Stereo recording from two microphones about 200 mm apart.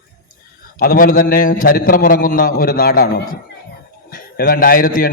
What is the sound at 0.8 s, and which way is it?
A man's voice, 45° left (ahead or behind).